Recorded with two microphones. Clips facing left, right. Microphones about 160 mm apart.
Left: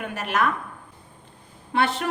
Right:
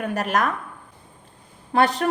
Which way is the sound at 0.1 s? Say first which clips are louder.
Right 2 dB; 40° right (ahead or behind).